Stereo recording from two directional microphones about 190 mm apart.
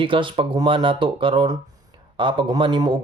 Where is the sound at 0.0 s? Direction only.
25° right (ahead or behind).